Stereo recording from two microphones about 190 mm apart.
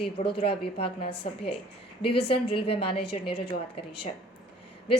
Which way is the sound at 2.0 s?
65° left (ahead or behind).